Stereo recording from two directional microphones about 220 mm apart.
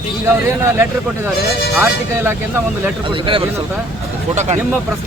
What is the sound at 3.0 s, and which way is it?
Speech, 25° right (ahead or behind).